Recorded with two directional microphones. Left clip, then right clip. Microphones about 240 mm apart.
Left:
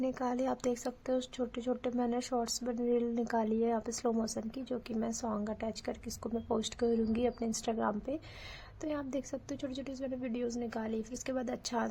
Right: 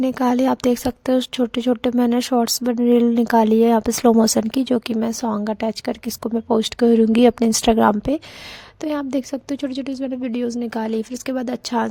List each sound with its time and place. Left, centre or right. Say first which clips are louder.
0.0 s speech: right 15 dB; right